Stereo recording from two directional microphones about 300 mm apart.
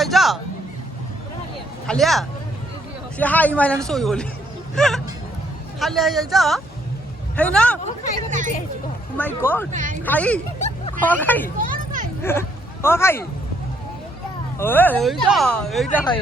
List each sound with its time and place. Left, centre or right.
0.0 s a sound: centre
1.9 s speech: centre
8.3 s speech: right
9.1 s speech: centre
9.7 s speech: right
10.0 s speech: centre
11.6 s children playing: right
12.2 s speech: centre
14.6 s speech: centre